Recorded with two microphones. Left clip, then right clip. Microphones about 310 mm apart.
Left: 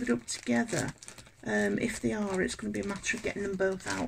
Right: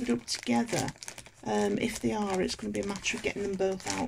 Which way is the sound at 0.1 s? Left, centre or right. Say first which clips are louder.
Even; centre.